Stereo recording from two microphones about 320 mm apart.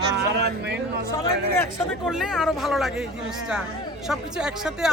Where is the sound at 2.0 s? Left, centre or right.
Centre.